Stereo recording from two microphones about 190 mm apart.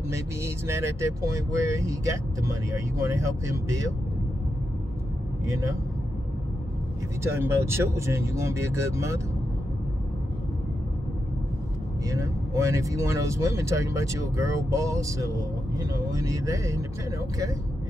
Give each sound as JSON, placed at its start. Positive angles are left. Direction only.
{"t": 0.1, "sound": "speech", "side_deg": -15}
{"t": 5.5, "sound": "speech", "side_deg": -15}
{"t": 7.3, "sound": "speech", "side_deg": -10}
{"t": 12.1, "sound": "speech", "side_deg": -15}